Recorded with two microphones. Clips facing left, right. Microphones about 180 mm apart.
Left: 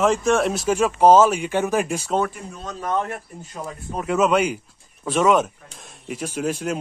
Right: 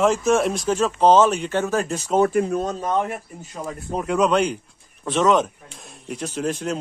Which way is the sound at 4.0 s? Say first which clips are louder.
Even; 5° left (ahead or behind).